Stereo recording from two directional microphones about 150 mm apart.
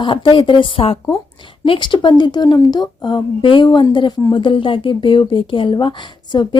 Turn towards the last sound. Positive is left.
turn(degrees=30)  # may be behind; listen again after turning